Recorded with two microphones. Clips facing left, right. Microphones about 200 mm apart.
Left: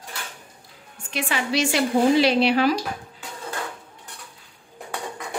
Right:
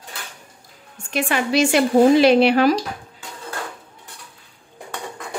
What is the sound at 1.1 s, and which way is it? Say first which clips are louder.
A woman's voice: right 5 dB; 50° right (ahead or behind).